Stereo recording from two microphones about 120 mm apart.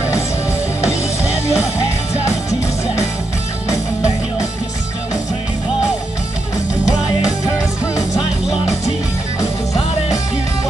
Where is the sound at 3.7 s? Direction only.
25° left (ahead or behind).